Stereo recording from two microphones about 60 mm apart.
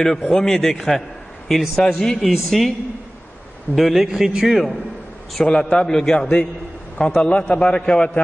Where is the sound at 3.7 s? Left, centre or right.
Centre.